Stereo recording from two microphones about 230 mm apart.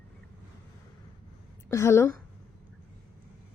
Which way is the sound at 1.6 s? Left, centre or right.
Centre.